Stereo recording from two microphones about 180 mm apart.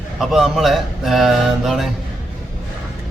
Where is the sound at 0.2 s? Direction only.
Centre (ahead or behind).